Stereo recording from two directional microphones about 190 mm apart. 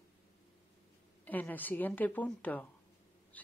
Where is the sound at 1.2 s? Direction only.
10° left (ahead or behind).